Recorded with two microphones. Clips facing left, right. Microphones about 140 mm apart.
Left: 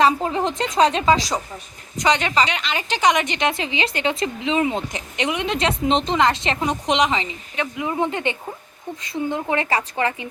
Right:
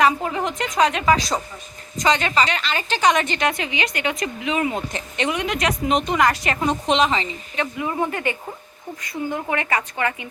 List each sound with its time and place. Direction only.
0.0 s a woman's voice: 30° left (ahead or behind)
2.0 s a woman's voice: 15° left (ahead or behind)